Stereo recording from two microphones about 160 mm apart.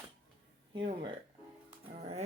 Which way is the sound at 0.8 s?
30° right (ahead or behind).